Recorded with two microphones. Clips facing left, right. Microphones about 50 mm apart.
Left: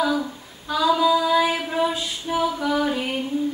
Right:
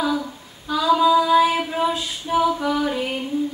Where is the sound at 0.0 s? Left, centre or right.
Centre.